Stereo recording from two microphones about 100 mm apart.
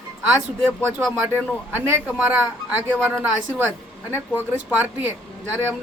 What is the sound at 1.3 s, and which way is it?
A man's voice, 20° right (ahead or behind).